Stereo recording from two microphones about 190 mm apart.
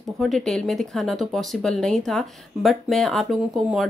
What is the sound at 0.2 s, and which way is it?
A woman's voice, centre (ahead or behind).